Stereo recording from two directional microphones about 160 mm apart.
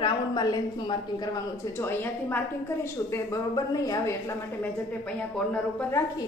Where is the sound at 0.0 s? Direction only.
25° left (ahead or behind).